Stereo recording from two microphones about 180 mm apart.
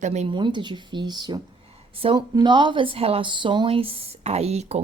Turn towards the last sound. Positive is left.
turn(degrees=-35)  # may be behind; listen again after turning